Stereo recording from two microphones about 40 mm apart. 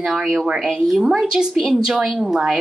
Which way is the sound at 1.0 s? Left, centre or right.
Centre.